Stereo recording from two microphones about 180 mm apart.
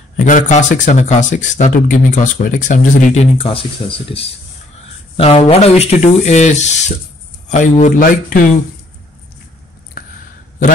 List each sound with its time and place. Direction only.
0.2 s speech: 45° left (ahead or behind)